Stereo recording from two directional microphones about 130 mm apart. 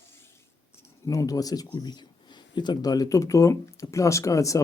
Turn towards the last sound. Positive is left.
turn(degrees=25)  # may be behind; listen again after turning